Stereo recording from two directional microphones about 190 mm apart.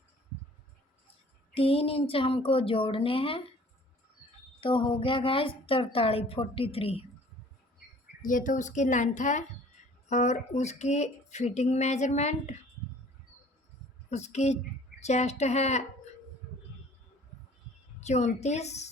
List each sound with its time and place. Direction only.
1.5 s a woman's voice: 30° left (ahead or behind)
4.6 s a woman's voice: 25° left (ahead or behind)
8.2 s speech: 45° left (ahead or behind)
14.1 s speech: 35° left (ahead or behind)
18.0 s speech: 35° left (ahead or behind)